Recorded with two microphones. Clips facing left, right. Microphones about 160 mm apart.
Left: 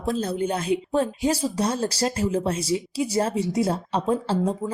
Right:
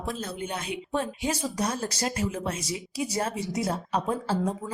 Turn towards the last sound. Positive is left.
turn(degrees=30)  # may be behind; listen again after turning